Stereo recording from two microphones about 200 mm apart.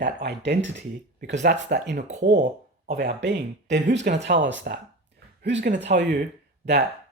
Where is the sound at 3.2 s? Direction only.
60° right (ahead or behind).